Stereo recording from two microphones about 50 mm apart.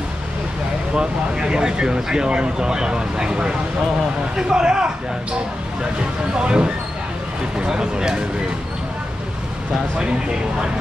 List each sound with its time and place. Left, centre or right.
0.9 s speech: centre
6.3 s speech: centre
9.9 s speech: centre